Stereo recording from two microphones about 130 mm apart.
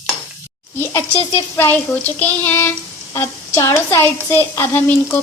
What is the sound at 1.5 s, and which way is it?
A woman's voice, 15° left (ahead or behind).